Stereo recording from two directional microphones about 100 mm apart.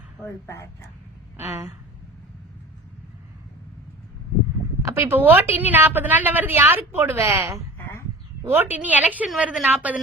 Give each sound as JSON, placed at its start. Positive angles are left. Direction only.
{"t": 0.2, "sound": "speech", "side_deg": 25}
{"t": 1.4, "sound": "a woman's voice", "side_deg": -25}
{"t": 4.9, "sound": "a sound", "side_deg": -25}
{"t": 5.2, "sound": "a woman's voice", "side_deg": -25}
{"t": 7.8, "sound": "a sound", "side_deg": 25}
{"t": 8.4, "sound": "a woman's voice", "side_deg": -20}